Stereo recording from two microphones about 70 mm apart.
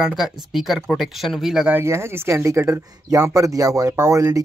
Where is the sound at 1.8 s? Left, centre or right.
Right.